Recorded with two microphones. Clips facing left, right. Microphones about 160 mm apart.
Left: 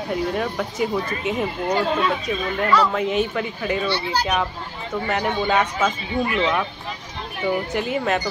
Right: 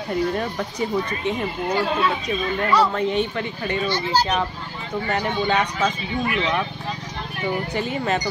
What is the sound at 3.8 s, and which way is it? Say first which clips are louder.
Speech: right 1 dB; 40° right (ahead or behind).